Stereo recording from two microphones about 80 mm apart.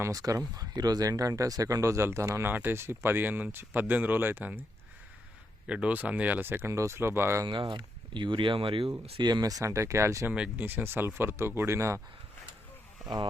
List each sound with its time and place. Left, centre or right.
0.0 s speech: right
2.5 s speech: right
5.6 s speech: centre; by 7.4 s right
7.4 s speech: right
9.1 s speech: right
10.3 s speech: centre
10.7 s speech: right